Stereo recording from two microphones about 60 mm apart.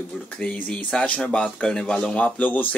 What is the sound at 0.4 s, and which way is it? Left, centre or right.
Speech, left.